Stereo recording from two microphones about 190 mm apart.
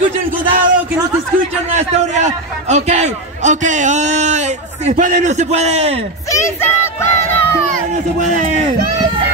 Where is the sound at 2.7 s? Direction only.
35° right (ahead or behind).